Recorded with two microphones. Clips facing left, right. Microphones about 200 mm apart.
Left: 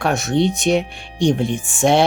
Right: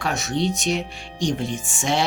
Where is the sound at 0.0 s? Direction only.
55° left (ahead or behind).